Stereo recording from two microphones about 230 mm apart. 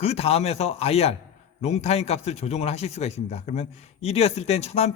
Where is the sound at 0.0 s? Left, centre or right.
Left.